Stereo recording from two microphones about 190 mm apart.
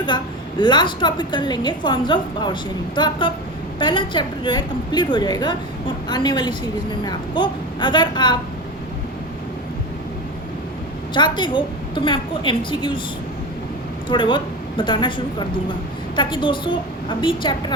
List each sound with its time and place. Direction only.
0.6 s a woman's voice: 25° left (ahead or behind)
11.1 s a woman's voice: 25° left (ahead or behind)
14.1 s a woman's voice: 25° left (ahead or behind)